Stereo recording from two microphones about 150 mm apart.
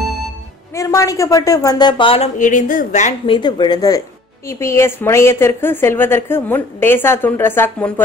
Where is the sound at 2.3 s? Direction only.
60° left (ahead or behind).